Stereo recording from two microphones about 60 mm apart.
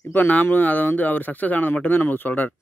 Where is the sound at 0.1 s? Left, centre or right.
Left.